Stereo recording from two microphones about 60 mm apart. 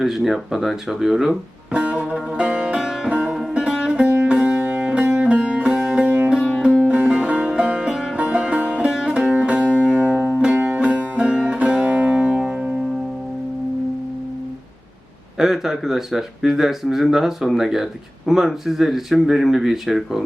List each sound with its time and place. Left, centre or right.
0.0 s speech: centre
1.7 s music: centre
2.5 s music: right
2.7 s music: centre
3.1 s music: right
4.0 s music: right
6.1 s music: right; by 8.1 s centre
8.1 s music: right
8.9 s music: centre
15.4 s speech: centre